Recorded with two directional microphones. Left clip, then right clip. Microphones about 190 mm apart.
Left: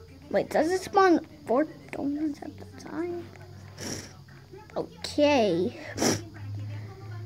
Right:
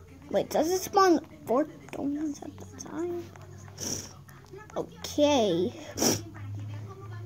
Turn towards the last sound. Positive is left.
turn(degrees=0)  # may be behind; listen again after turning